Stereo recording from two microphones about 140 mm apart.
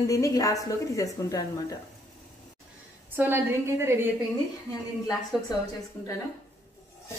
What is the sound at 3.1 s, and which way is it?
A woman's voice, 15° right (ahead or behind).